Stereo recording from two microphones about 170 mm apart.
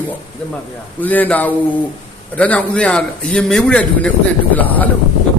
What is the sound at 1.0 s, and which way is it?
A man's voice, 10° left (ahead or behind).